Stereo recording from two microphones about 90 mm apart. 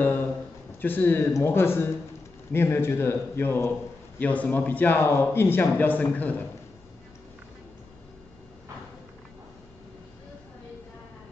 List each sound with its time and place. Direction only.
0.7 s a man's voice: 20° left (ahead or behind)